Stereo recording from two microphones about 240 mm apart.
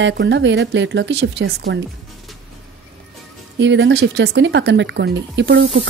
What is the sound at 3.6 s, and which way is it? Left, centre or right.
Speech, right.